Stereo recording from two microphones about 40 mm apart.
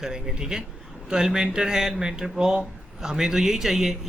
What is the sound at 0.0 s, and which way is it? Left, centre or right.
Speech, centre.